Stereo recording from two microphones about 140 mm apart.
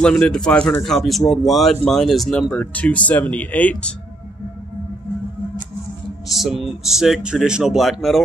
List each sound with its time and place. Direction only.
0.0 s speech: 5° left (ahead or behind)
6.2 s speech: centre (ahead or behind)